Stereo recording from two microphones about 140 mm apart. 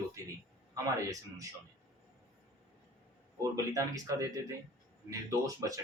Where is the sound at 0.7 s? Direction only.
25° right (ahead or behind).